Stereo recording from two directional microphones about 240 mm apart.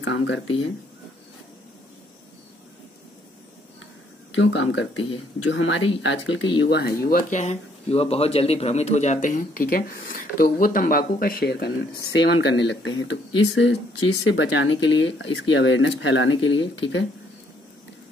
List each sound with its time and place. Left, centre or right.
0.0 s speech: left
4.4 s speech: left